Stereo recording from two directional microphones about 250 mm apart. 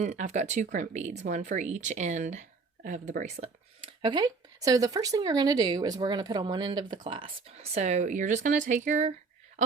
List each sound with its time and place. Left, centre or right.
0.0 s speech: right